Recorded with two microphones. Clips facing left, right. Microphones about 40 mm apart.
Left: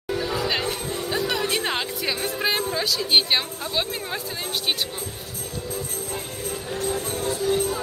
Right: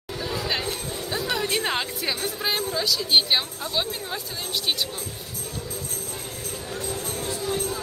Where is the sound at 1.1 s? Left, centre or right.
Centre.